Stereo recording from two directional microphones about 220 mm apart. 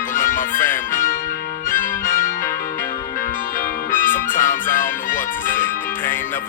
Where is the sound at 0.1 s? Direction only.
40° left (ahead or behind).